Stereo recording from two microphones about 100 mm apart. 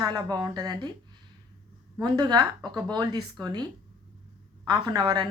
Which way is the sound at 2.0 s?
45° right (ahead or behind).